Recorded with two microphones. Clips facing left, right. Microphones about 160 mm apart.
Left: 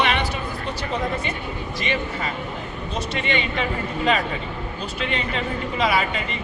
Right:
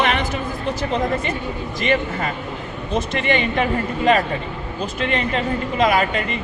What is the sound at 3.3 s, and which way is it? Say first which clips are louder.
Speech: right 6 dB; 50° right (ahead or behind).